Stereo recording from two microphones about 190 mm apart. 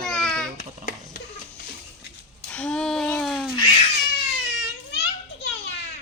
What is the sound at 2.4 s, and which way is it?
A child's voice, 5° left (ahead or behind).